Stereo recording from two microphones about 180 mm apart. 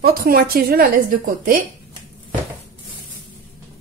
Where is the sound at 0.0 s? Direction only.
60° right (ahead or behind).